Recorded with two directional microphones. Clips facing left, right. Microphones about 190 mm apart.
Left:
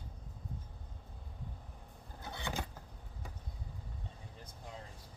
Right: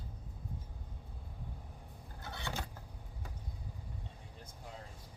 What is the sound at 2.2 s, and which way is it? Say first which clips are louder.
Vehicle: left 2 dB; 15° left (ahead or behind).